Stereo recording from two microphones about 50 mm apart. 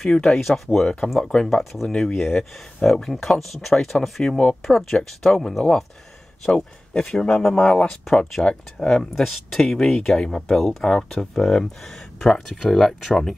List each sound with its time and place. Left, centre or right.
0.0 s speech: centre
1.6 s speech: centre
1.9 s speech: centre
4.2 s speech: left
4.6 s speech: centre
7.0 s speech: centre
9.1 s speech: centre